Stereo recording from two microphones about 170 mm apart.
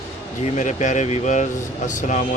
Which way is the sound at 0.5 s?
45° left (ahead or behind).